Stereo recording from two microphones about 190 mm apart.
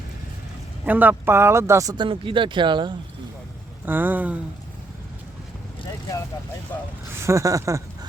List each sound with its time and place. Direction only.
0.9 s speech: 10° right (ahead or behind); by 2.9 s 25° right (ahead or behind)
3.8 s speech: 10° right (ahead or behind)
5.8 s vehicle: 20° left (ahead or behind)
6.7 s speech: 10° left (ahead or behind)
7.2 s speech: 15° right (ahead or behind)